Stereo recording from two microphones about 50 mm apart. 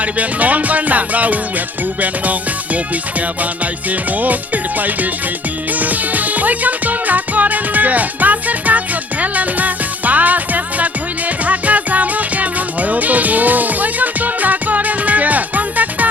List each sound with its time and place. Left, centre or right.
0.0 s music: right
9.2 s speech: right
11.4 s music: right